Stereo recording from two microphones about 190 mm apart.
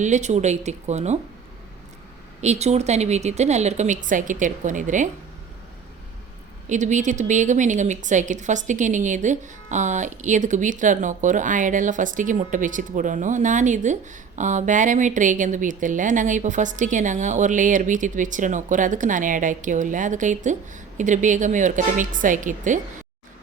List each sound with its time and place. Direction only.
0.0 s a woman's voice: 40° right (ahead or behind)
2.4 s a woman's voice: 35° right (ahead or behind)
6.7 s a woman's voice: 40° right (ahead or behind)